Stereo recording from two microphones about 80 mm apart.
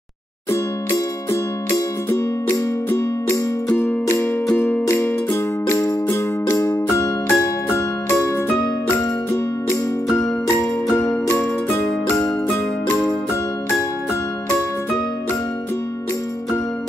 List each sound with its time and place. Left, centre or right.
1.7 s music: left
4.6 s music: centre
10.6 s music: centre; by 13.8 s left